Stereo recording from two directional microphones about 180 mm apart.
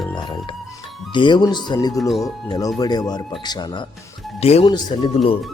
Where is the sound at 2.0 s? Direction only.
Centre (ahead or behind).